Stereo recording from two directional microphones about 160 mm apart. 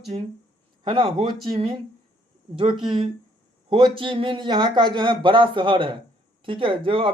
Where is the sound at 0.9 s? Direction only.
30° right (ahead or behind).